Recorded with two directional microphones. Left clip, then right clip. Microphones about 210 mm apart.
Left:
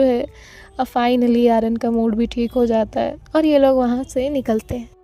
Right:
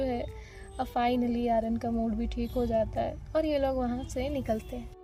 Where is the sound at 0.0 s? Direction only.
50° left (ahead or behind).